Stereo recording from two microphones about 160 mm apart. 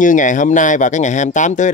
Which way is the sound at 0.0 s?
55° left (ahead or behind).